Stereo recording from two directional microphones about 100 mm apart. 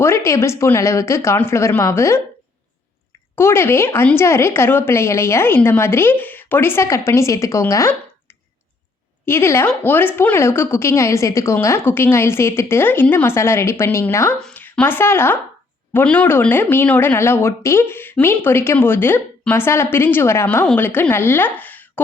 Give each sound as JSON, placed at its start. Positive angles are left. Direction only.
{"t": 0.0, "sound": "speech", "side_deg": 25}
{"t": 3.3, "sound": "speech", "side_deg": 25}
{"t": 9.2, "sound": "a woman's voice", "side_deg": 25}